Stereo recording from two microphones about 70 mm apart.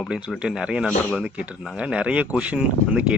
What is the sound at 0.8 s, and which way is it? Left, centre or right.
Speech, centre.